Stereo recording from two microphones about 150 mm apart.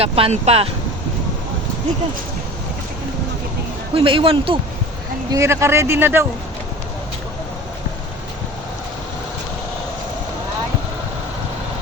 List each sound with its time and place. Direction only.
0.0 s speech: 45° right (ahead or behind)
3.9 s speech: 35° right (ahead or behind)
5.3 s speech: 20° right (ahead or behind)